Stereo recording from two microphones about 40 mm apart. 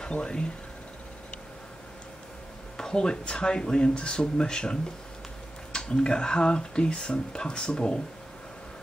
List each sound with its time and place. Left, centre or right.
0.1 s speech: left
2.8 s speech: centre